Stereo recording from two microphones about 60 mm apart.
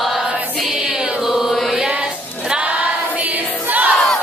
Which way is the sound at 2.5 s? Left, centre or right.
Right.